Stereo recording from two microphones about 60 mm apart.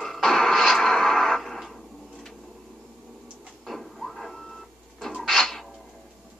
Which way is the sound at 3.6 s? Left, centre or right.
Centre.